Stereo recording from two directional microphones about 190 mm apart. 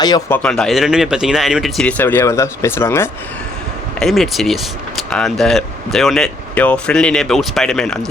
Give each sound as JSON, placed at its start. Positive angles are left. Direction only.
{"t": 0.0, "sound": "speech", "side_deg": 20}
{"t": 0.3, "sound": "speech", "side_deg": 5}
{"t": 4.0, "sound": "speech", "side_deg": 0}